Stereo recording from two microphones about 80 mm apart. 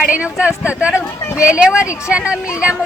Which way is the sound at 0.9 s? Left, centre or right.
Left.